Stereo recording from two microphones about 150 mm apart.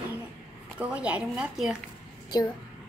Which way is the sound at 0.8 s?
10° right (ahead or behind).